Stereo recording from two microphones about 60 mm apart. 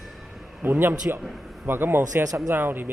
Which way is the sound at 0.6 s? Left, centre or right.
Right.